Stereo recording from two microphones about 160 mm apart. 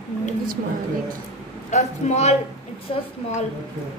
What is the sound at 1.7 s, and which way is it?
A man's voice, 45° left (ahead or behind).